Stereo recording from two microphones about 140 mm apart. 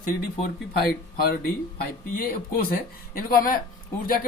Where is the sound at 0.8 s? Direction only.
90° left.